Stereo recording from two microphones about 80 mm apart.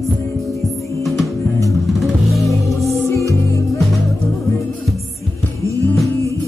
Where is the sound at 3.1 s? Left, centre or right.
Left.